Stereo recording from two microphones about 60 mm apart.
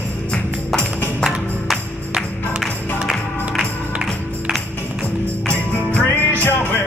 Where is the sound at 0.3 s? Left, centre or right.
Centre.